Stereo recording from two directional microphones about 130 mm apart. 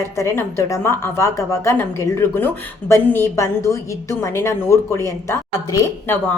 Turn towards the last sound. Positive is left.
turn(degrees=20)  # may be behind; listen again after turning